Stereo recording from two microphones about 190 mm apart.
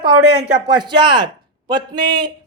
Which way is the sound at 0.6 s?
20° right (ahead or behind).